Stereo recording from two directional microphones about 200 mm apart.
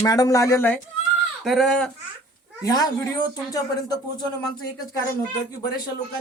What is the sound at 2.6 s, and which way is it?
Speech, 20° left (ahead or behind).